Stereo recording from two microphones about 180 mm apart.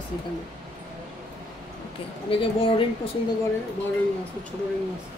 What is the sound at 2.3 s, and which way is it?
Speech, 30° left (ahead or behind).